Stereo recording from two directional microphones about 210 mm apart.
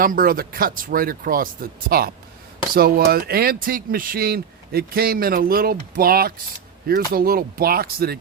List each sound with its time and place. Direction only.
0.0 s speech: 40° right (ahead or behind)